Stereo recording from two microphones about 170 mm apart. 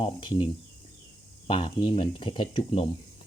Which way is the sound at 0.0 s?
30° left (ahead or behind).